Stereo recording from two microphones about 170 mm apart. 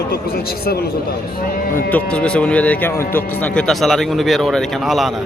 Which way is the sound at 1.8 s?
10° left (ahead or behind).